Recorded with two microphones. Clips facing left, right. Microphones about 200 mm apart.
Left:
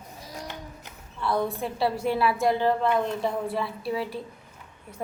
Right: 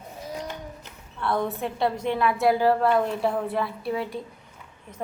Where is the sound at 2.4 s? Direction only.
10° right (ahead or behind).